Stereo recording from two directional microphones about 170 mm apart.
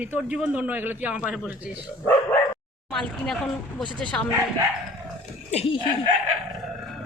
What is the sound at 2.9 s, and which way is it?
Speech, 5° left (ahead or behind).